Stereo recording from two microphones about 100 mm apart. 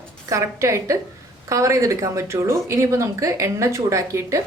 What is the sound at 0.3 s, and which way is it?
Speech, 30° right (ahead or behind).